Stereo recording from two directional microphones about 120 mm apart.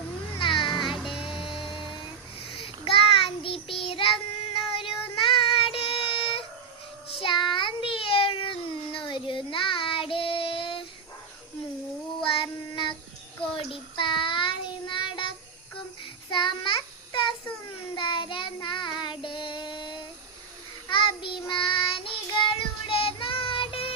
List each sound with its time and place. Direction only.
0.3 s cat: 45° left (ahead or behind)
0.9 s music: centre (ahead or behind)
1.2 s music: 45° left (ahead or behind)
2.4 s child singing: 50° left (ahead or behind)
12.2 s child singing: 45° left (ahead or behind)
16.3 s child singing: 40° left (ahead or behind)